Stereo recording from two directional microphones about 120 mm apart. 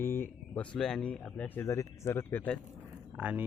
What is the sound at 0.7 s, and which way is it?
Speech, 5° left (ahead or behind).